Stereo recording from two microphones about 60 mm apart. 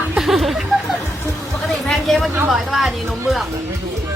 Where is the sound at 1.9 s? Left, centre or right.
Centre.